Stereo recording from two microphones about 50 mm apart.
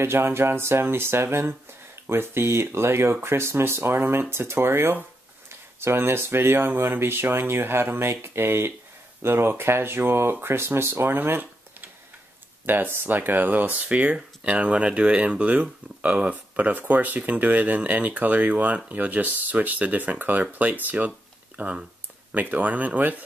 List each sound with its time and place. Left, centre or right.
0.0 s speech: right
12.6 s speech: right
13.8 s speech: right